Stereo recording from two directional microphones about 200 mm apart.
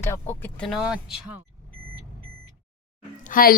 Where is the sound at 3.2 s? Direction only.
45° left (ahead or behind).